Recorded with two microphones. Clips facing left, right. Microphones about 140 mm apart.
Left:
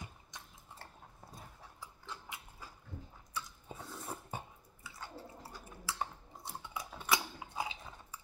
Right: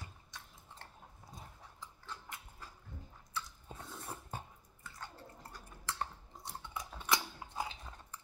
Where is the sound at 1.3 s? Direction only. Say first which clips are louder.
Right 1 dB; 10° left (ahead or behind).